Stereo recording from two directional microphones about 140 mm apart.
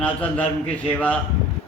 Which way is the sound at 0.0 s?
10° left (ahead or behind).